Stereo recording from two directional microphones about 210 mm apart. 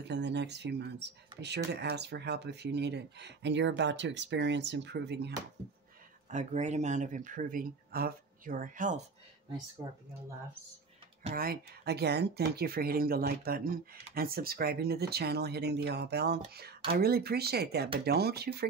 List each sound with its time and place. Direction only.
0.1 s speech: 55° right (ahead or behind)
6.2 s speech: 35° right (ahead or behind)
11.3 s speech: 45° right (ahead or behind)